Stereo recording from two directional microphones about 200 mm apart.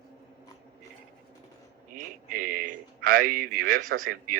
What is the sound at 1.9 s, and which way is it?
A man's voice, 45° right (ahead or behind).